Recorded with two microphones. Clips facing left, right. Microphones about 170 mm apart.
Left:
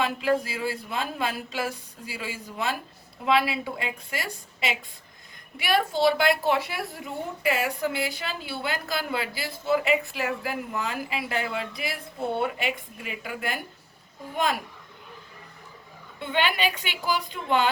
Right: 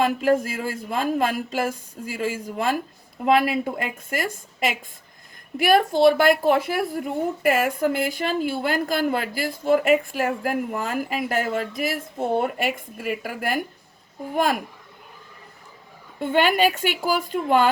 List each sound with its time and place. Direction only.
0.0 s speech: 45° right (ahead or behind)
16.1 s speech: 45° right (ahead or behind)